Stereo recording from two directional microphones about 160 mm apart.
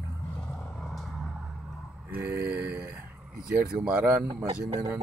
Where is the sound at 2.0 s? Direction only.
10° right (ahead or behind).